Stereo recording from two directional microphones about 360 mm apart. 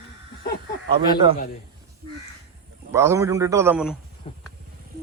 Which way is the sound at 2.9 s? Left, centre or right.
Centre.